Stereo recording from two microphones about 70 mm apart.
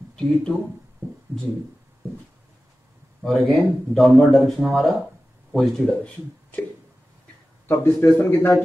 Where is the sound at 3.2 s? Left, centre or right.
Centre.